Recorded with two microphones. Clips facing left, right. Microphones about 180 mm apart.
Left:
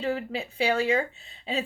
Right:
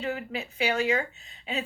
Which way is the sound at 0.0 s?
30° left (ahead or behind).